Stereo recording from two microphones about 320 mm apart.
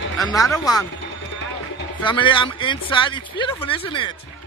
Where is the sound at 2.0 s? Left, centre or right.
Centre.